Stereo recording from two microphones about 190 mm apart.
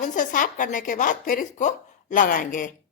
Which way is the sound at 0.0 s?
45° left (ahead or behind).